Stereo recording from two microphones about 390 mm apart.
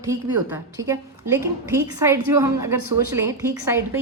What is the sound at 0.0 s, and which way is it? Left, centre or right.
A woman's voice, centre.